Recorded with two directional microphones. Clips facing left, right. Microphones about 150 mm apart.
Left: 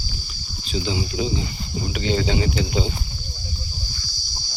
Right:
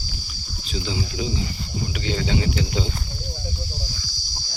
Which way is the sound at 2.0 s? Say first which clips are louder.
Left 3 dB; 25° left (ahead or behind).